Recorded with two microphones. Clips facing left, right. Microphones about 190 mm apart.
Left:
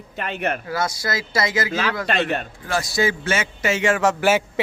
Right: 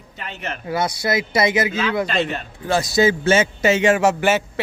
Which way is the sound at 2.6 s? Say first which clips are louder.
Right 6 dB; 25° right (ahead or behind).